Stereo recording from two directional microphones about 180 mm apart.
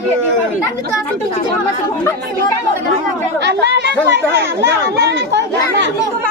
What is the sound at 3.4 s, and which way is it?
Speech, 70° right (ahead or behind).